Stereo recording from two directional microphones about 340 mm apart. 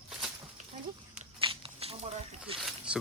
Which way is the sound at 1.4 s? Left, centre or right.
Centre.